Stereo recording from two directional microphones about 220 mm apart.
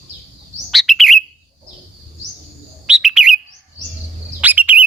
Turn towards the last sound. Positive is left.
turn(degrees=-10)  # may be behind; listen again after turning